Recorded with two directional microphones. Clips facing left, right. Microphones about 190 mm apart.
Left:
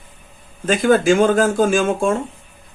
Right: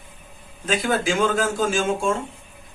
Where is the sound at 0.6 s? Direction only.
50° left (ahead or behind).